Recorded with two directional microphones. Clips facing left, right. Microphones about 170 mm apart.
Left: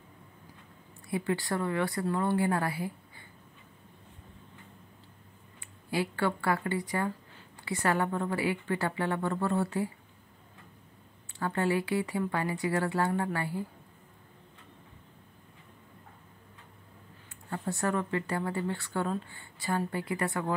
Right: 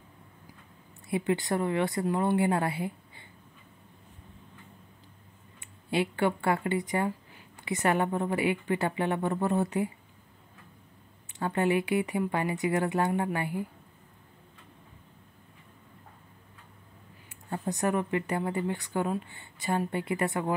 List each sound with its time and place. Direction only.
1.0 s a woman's voice: 20° right (ahead or behind)
5.6 s speech: 20° right (ahead or behind)
11.3 s a woman's voice: 20° right (ahead or behind)
17.5 s a woman's voice: 20° right (ahead or behind)